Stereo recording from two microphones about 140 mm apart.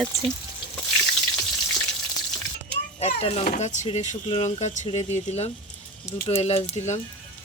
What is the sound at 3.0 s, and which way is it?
Speech, 45° left (ahead or behind).